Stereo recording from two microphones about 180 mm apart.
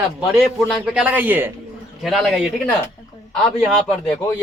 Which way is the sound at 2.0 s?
Centre (ahead or behind).